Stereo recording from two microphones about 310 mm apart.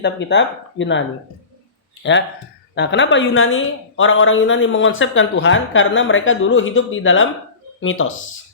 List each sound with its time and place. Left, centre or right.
0.0 s a woman's voice: left
2.7 s a woman's voice: left